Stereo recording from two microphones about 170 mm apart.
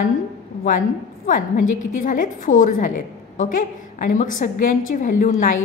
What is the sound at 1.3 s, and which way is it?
A woman's voice, 50° left (ahead or behind).